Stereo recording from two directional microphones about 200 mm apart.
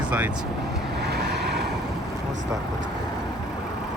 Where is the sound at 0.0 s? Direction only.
5° right (ahead or behind).